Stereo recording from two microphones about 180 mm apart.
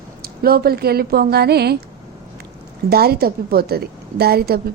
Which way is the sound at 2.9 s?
60° right (ahead or behind).